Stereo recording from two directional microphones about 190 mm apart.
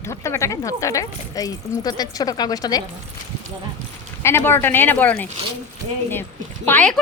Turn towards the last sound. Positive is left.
turn(degrees=10)  # may be behind; listen again after turning